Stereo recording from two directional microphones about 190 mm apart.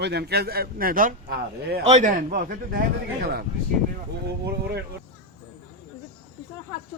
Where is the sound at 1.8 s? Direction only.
35° right (ahead or behind).